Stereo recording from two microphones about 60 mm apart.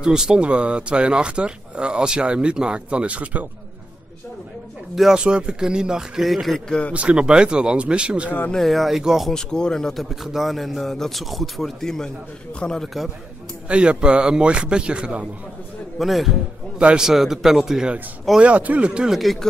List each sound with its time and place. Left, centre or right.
0.0 s speech: centre
4.9 s a man's voice: centre
5.2 s speech: centre
6.9 s speech: centre
8.5 s a man's voice: centre
9.3 s speech: centre
10.0 s a man's voice: centre
13.7 s speech: centre
16.0 s a man's voice: centre
16.7 s speech: centre
18.4 s a man's voice: right